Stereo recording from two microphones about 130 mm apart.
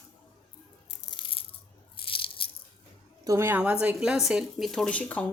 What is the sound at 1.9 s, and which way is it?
Biting, 45° left (ahead or behind).